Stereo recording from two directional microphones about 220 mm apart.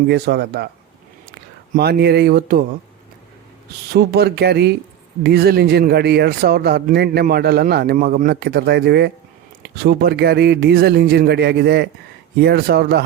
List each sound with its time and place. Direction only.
0.1 s speech: 50° right (ahead or behind)
1.7 s speech: 45° right (ahead or behind)
3.9 s speech: 45° right (ahead or behind)